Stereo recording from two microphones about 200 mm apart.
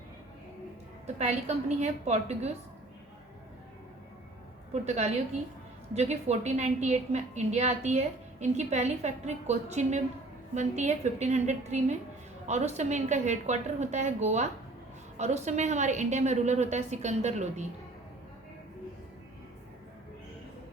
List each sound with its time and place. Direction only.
1.0 s a woman's voice: 35° right (ahead or behind)
4.7 s a woman's voice: 35° right (ahead or behind)